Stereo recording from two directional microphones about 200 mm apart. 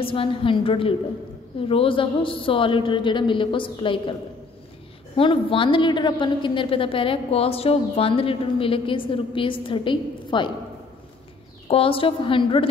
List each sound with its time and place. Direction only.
0.0 s a woman's voice: 25° left (ahead or behind)
5.1 s a woman's voice: 25° left (ahead or behind)
11.6 s a woman's voice: 25° left (ahead or behind)